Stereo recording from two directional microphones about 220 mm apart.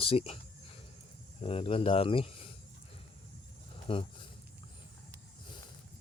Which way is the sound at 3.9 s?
25° left (ahead or behind).